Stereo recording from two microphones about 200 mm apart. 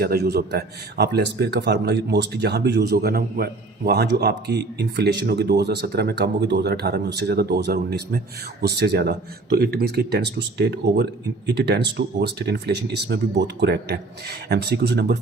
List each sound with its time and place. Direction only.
0.0 s a man's voice: 55° right (ahead or behind)